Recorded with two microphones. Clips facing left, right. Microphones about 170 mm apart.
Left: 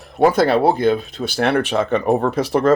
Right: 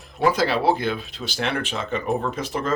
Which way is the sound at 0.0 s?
65° left (ahead or behind).